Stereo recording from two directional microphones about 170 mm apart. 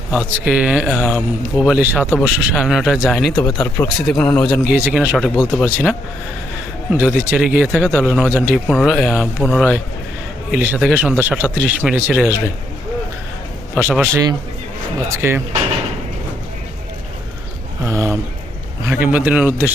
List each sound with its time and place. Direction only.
0.1 s a man's voice: 5° right (ahead or behind)
3.3 s speech: 20° left (ahead or behind)
4.0 s a man's voice: 5° left (ahead or behind)
4.6 s a man's voice: 10° right (ahead or behind)
13.7 s speech: 10° right (ahead or behind)
17.8 s speech: 15° right (ahead or behind)